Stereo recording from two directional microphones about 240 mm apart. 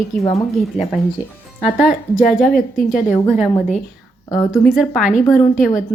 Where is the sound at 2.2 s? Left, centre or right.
Left.